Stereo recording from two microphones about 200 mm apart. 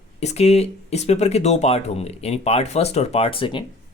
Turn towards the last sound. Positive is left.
turn(degrees=25)  # may be behind; listen again after turning